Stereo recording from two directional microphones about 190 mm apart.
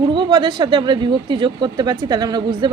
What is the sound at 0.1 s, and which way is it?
A man's voice, 25° right (ahead or behind).